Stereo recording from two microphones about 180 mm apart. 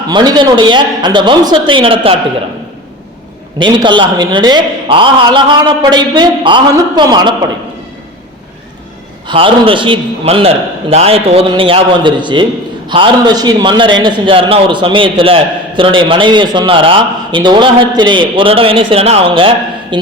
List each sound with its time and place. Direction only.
0.1 s a man's voice: 25° right (ahead or behind)
3.6 s a man's voice: 25° right (ahead or behind)
9.2 s a man's voice: 30° right (ahead or behind)